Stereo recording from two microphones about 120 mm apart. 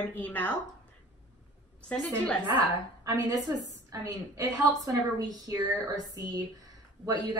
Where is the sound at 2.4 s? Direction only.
30° right (ahead or behind).